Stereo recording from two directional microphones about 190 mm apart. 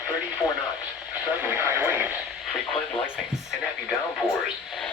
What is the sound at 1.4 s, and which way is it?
Speech, 10° right (ahead or behind).